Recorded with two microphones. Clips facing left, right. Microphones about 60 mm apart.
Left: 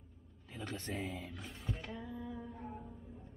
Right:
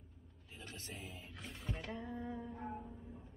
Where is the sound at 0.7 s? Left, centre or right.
Left.